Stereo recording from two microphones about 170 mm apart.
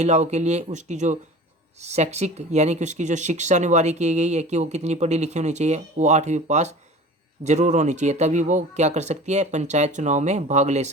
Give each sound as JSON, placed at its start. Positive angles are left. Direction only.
{"t": 0.0, "sound": "speech", "side_deg": -40}